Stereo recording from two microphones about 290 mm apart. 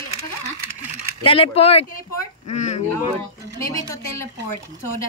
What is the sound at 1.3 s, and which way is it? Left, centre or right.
Speech, centre.